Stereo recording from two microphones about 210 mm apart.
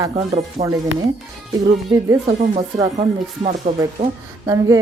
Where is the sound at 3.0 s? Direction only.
30° right (ahead or behind).